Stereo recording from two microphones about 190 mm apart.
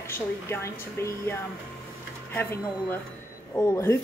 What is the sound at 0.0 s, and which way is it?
A woman's voice, 15° left (ahead or behind).